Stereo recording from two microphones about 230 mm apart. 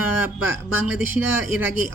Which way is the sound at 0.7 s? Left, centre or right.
Centre.